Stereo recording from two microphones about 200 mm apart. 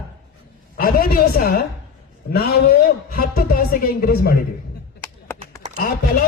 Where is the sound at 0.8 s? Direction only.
45° left (ahead or behind).